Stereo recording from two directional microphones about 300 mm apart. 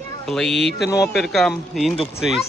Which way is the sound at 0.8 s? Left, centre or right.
Centre.